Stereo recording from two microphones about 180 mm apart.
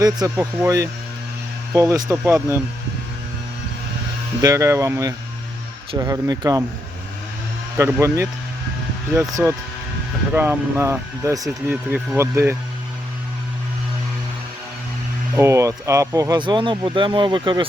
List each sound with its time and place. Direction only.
0.0 s speech: 15° right (ahead or behind)
4.4 s speech: 15° right (ahead or behind)
7.8 s speech: 15° right (ahead or behind)
10.3 s speech: 10° right (ahead or behind)
15.4 s speech: 15° right (ahead or behind)